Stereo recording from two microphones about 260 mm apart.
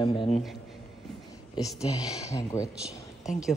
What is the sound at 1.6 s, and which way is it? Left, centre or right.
Speech, centre.